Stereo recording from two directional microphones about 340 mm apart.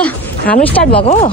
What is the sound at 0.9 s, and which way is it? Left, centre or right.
Speech, centre.